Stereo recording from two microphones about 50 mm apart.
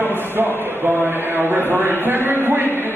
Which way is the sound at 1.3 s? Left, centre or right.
Right.